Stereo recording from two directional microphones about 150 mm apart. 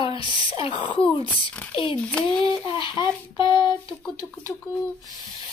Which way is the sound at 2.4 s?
30° left (ahead or behind).